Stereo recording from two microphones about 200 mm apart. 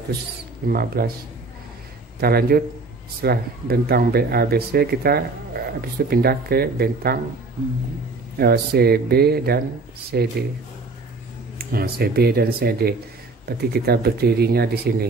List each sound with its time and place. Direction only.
0.7 s speech: 50° right (ahead or behind)
2.1 s speech: 50° right (ahead or behind)
8.4 s speech: 50° right (ahead or behind)
11.5 s speech: 50° right (ahead or behind)